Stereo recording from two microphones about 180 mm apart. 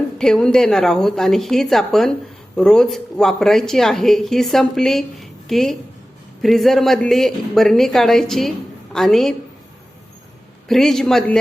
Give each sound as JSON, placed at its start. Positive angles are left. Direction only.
{"t": 0.2, "sound": "speech", "side_deg": 5}
{"t": 10.7, "sound": "speech", "side_deg": 0}